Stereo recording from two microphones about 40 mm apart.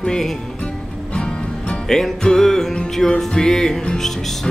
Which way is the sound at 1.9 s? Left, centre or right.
Centre.